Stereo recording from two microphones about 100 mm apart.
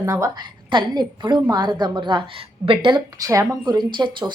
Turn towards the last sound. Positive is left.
turn(degrees=-50)  # may be behind; listen again after turning